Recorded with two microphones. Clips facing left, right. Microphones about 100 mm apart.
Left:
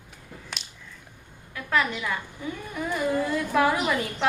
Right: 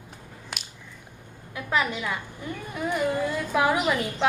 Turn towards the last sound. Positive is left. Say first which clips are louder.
# right 1 dB
turn(degrees=-10)  # may be behind; listen again after turning